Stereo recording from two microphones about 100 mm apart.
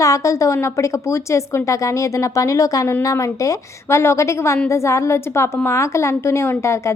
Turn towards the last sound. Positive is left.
turn(degrees=30)  # may be behind; listen again after turning